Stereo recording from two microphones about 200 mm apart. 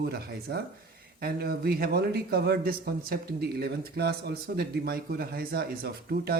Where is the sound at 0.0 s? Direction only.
55° right (ahead or behind).